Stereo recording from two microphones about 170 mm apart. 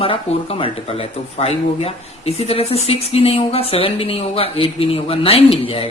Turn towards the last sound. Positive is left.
turn(degrees=35)  # may be behind; listen again after turning